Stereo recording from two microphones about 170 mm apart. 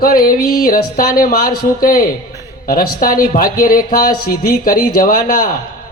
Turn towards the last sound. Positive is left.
turn(degrees=55)  # may be behind; listen again after turning